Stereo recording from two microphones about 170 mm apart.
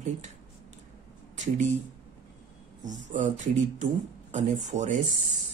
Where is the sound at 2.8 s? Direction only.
45° right (ahead or behind).